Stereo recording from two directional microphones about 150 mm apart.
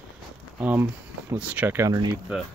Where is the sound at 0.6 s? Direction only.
10° right (ahead or behind).